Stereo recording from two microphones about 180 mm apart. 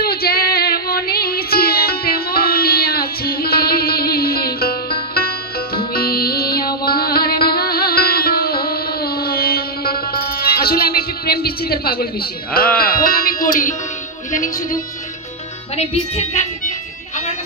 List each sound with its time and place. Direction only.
0.0 s music: 60° left (ahead or behind)
15.7 s speech: 35° left (ahead or behind)